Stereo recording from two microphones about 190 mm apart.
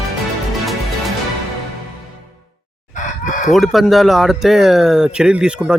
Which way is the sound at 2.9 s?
45° left (ahead or behind).